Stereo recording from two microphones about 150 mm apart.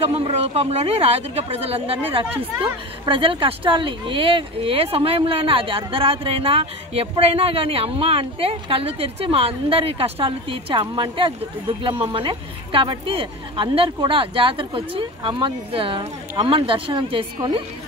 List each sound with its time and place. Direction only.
0.1 s speech: 45° right (ahead or behind)